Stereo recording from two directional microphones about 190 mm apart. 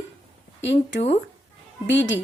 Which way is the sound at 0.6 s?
65° left (ahead or behind).